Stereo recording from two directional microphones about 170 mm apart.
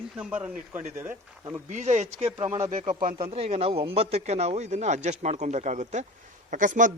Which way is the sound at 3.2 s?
35° right (ahead or behind).